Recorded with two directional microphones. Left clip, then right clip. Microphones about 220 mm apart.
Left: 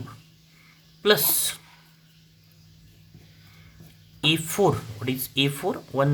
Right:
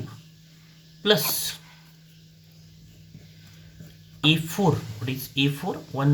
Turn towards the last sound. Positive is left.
turn(degrees=45)  # may be behind; listen again after turning